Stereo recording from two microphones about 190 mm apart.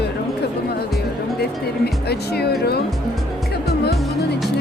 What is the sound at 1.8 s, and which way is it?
Speech, 60° left (ahead or behind).